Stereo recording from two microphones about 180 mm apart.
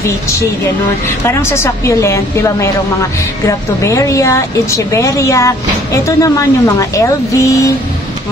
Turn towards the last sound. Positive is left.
turn(degrees=15)  # may be behind; listen again after turning